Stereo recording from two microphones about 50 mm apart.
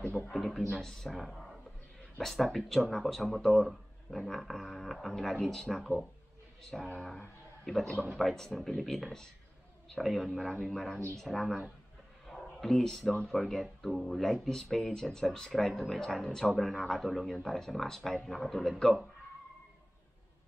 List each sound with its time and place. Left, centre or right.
0.0 s a man's voice: left
0.3 s a man's voice: centre
10.4 s a man's voice: centre
12.3 s a sound: centre
13.3 s speech: centre